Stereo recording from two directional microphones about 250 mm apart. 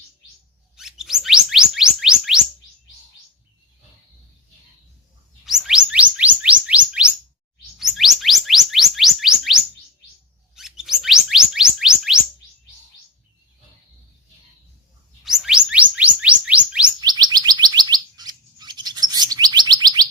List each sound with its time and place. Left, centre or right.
0.8 s chirp tone: centre
5.5 s chirp tone: centre
15.2 s chirp tone: centre
17.0 s bird: centre